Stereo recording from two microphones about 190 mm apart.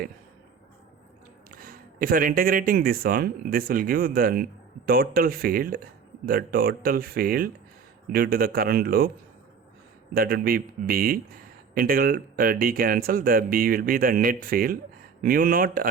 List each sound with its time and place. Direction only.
1.5 s speech: 45° right (ahead or behind)
10.2 s speech: 50° right (ahead or behind)